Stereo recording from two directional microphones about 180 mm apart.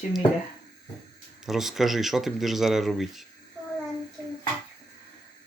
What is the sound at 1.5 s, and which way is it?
Speech, centre (ahead or behind).